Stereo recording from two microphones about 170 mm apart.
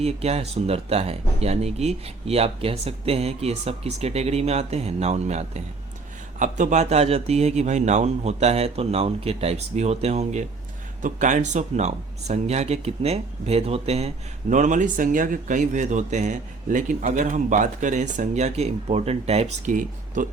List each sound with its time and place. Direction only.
0.0 s speech: 40° right (ahead or behind)